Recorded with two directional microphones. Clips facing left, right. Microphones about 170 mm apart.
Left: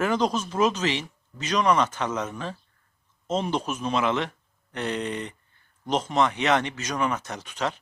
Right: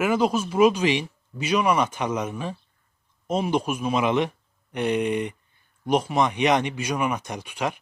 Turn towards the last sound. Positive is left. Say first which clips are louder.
# right 1 dB
turn(degrees=-10)  # may be behind; listen again after turning